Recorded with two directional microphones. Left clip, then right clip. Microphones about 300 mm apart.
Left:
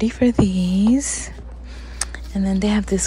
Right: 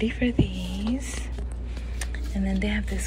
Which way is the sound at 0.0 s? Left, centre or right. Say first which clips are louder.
Left 8 dB; left.